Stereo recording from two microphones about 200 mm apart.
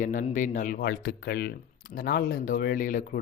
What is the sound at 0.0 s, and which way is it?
Speech, 40° left (ahead or behind).